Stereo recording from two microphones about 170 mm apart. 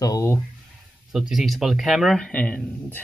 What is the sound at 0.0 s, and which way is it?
Speech, 20° left (ahead or behind).